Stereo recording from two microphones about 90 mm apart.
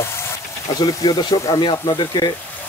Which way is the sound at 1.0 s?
55° left (ahead or behind).